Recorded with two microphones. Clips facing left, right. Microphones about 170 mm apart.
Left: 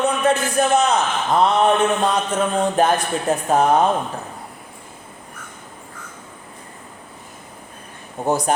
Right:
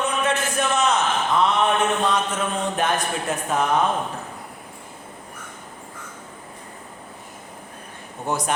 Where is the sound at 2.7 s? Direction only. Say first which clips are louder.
Left 5 dB; 35° left (ahead or behind).